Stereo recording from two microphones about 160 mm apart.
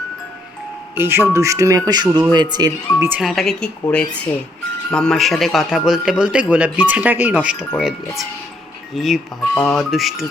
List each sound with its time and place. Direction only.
0.9 s speech: 15° right (ahead or behind)
3.1 s a man's voice: centre (ahead or behind)
9.0 s a man's voice: centre (ahead or behind)